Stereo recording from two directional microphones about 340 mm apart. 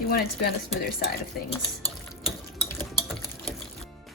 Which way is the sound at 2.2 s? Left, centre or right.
Centre.